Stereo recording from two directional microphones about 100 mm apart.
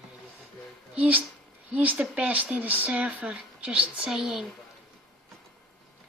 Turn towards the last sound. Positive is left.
turn(degrees=-5)  # may be behind; listen again after turning